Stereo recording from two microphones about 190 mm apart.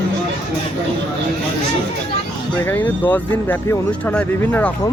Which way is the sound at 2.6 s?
10° left (ahead or behind).